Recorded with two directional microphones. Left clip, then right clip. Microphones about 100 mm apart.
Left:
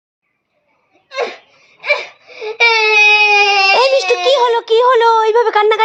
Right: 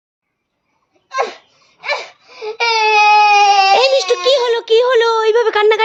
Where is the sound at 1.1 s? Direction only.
50° right (ahead or behind).